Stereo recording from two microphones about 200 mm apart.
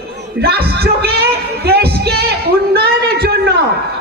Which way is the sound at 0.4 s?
50° right (ahead or behind).